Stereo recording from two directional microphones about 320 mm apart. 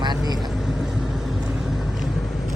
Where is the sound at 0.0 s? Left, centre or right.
Centre.